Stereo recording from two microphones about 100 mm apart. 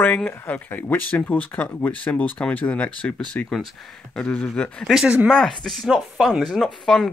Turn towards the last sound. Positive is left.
turn(degrees=5)  # may be behind; listen again after turning